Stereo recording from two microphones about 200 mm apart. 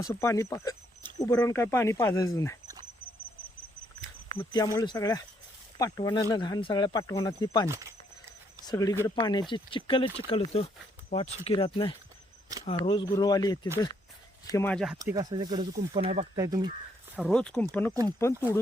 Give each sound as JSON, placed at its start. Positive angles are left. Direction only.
{"t": 0.0, "sound": "speech", "side_deg": 15}
{"t": 4.4, "sound": "speech", "side_deg": 15}
{"t": 7.7, "sound": "a sound", "side_deg": -15}
{"t": 8.6, "sound": "speech", "side_deg": 20}
{"t": 14.5, "sound": "speech", "side_deg": 10}
{"t": 14.9, "sound": "speech", "side_deg": -15}
{"t": 16.3, "sound": "speech", "side_deg": -20}
{"t": 17.2, "sound": "speech", "side_deg": 0}